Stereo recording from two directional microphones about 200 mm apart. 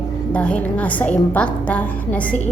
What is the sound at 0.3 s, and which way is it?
A woman's voice, 5° left (ahead or behind).